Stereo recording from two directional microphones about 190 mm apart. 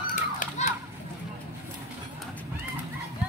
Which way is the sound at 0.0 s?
40° left (ahead or behind).